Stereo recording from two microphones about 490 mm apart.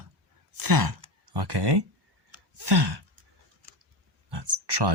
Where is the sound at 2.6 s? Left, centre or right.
Right.